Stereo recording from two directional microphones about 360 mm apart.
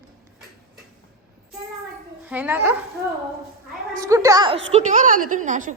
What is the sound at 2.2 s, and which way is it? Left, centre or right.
Speech, centre.